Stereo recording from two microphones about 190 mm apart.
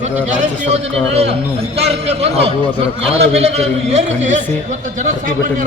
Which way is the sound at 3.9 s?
40° right (ahead or behind).